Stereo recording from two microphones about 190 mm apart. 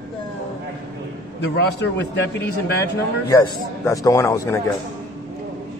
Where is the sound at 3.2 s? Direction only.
20° left (ahead or behind).